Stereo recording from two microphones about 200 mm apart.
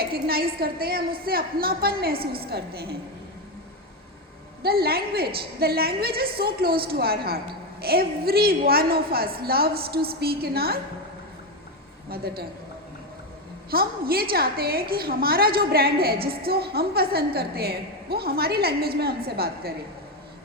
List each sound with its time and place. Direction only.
0.0 s a woman's voice: 50° right (ahead or behind)
4.6 s a woman's voice: 50° right (ahead or behind)
12.1 s a woman's voice: 50° right (ahead or behind)
13.7 s a woman's voice: 50° right (ahead or behind)